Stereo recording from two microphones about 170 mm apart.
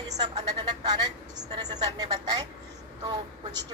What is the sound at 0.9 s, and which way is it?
A woman's voice, 25° right (ahead or behind).